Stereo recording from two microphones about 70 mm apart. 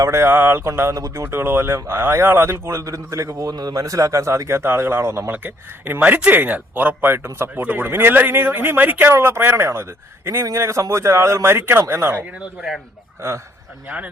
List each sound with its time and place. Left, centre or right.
0.0 s speech: right
5.3 s speech: right
9.1 s speech: right
13.8 s speech: right